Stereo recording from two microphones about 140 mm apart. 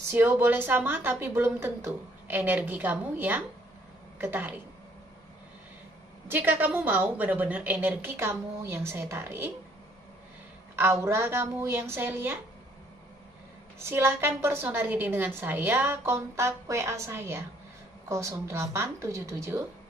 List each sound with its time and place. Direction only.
0.1 s a woman's voice: 15° right (ahead or behind)
6.2 s a woman's voice: 15° right (ahead or behind)
10.8 s a woman's voice: 15° right (ahead or behind)
13.7 s a woman's voice: 20° right (ahead or behind)